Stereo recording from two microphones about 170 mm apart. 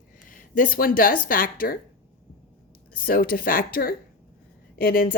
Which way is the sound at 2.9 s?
55° left (ahead or behind).